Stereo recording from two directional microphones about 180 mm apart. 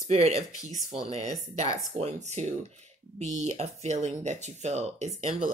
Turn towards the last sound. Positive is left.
turn(degrees=-40)  # may be behind; listen again after turning